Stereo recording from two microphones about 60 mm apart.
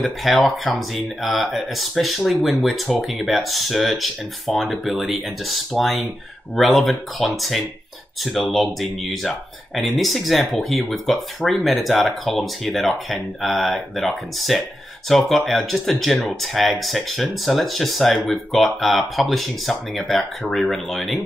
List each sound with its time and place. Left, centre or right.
0.0 s speech: centre